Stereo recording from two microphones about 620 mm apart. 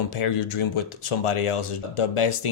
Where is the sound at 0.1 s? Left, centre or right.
Left.